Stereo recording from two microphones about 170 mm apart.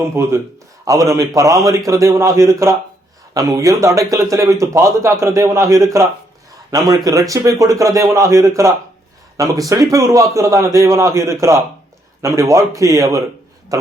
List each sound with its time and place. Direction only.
0.0 s a man's voice: 15° right (ahead or behind)